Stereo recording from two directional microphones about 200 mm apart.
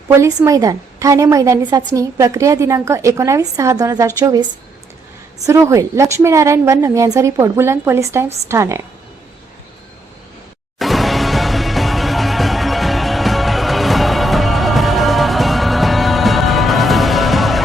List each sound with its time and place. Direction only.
0.2 s a woman's voice: 15° right (ahead or behind)
5.5 s a woman's voice: 15° right (ahead or behind)
10.8 s music: centre (ahead or behind)